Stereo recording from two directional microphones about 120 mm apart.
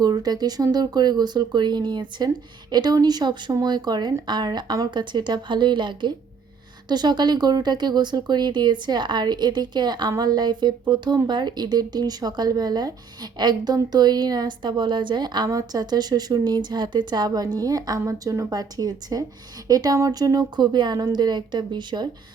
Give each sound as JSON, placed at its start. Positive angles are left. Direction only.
{"t": 0.0, "sound": "speech", "side_deg": -35}